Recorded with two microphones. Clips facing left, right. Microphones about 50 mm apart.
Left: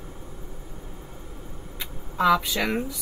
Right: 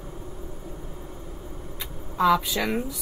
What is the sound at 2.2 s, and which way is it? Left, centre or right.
Speech, centre.